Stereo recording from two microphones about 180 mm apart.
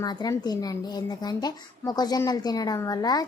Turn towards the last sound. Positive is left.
turn(degrees=20)  # may be behind; listen again after turning